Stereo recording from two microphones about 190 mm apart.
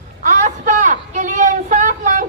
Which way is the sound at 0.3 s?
40° right (ahead or behind).